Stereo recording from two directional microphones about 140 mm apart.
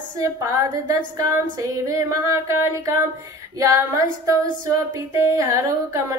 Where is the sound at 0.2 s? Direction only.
20° right (ahead or behind).